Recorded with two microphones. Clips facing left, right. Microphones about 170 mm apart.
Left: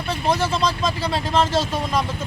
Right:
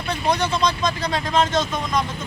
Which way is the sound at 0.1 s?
5° left (ahead or behind).